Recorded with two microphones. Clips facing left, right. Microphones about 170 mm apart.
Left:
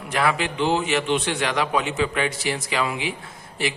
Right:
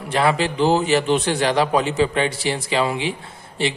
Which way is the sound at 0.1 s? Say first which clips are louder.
Right 4 dB; 30° right (ahead or behind).